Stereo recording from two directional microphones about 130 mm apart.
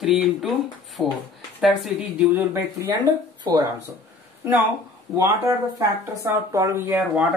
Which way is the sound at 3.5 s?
30° right (ahead or behind).